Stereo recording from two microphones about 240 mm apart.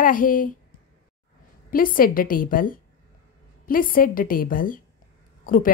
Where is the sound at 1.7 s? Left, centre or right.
Left.